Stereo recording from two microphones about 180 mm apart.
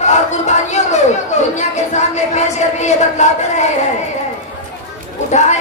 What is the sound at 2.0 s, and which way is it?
Speech, 40° left (ahead or behind).